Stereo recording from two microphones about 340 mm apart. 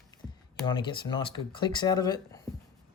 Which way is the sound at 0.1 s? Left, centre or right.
Centre.